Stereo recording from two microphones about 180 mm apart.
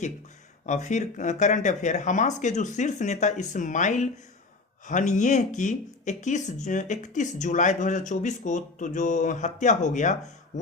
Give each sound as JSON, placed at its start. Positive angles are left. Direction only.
{"t": 0.6, "sound": "speech", "side_deg": 40}
{"t": 10.5, "sound": "music", "side_deg": 40}